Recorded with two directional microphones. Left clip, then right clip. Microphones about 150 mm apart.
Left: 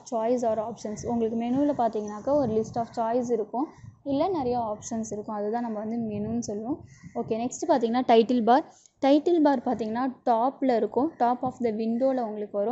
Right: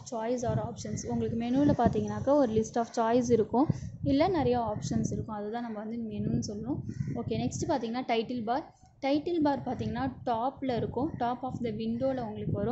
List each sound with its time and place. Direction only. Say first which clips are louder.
0.1 s a woman's voice: left 7 dB; 25° left (ahead or behind)
1.5 s a woman's voice: even; 5° left (ahead or behind); by 4.1 s 20° right (ahead or behind)
4.1 s a woman's voice: left 1 dB; 10° right (ahead or behind)
5.0 s a woman's voice: left 6 dB; 30° left (ahead or behind)
7.2 s a woman's voice: left 6 dB; 20° left (ahead or behind)
7.6 s a woman's voice: left 10 dB; 45° left (ahead or behind)
9.3 s a woman's voice: left 7 dB; 40° left (ahead or behind)